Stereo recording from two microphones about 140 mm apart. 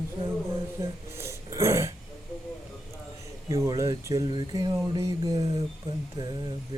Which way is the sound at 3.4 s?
20° right (ahead or behind).